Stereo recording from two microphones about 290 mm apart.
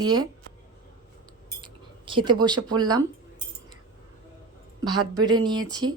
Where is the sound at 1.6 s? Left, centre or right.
Centre.